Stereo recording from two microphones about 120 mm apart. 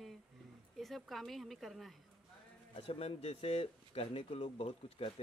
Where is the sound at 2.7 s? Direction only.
55° left (ahead or behind).